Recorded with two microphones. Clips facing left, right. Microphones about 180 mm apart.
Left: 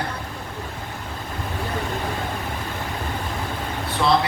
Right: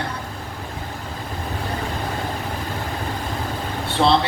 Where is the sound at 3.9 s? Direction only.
30° right (ahead or behind).